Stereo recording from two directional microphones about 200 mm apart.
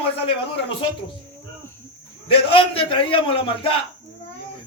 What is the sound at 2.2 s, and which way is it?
A man's voice, 25° left (ahead or behind).